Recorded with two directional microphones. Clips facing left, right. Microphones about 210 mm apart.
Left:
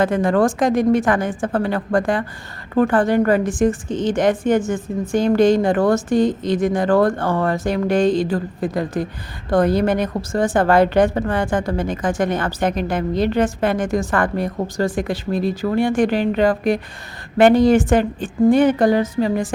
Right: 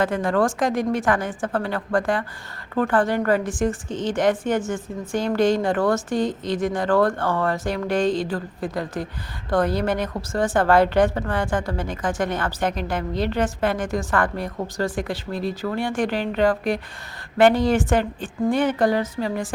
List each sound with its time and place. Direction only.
0.0 s a woman's voice: 20° left (ahead or behind)